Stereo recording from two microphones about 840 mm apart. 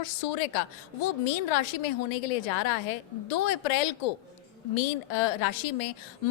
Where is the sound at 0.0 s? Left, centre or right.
Left.